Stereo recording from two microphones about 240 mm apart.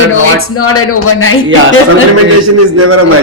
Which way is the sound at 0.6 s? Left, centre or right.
Left.